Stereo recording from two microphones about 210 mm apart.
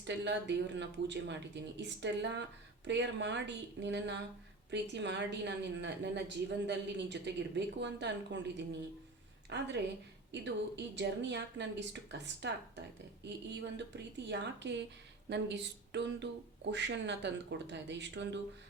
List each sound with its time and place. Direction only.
0.0 s a woman's voice: 55° right (ahead or behind)